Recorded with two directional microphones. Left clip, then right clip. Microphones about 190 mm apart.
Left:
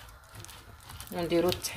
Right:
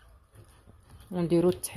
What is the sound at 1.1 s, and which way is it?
Speech, 40° right (ahead or behind).